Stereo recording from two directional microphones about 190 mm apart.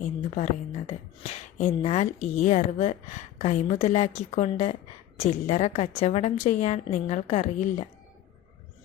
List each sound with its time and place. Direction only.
0.0 s a woman's voice: 35° left (ahead or behind)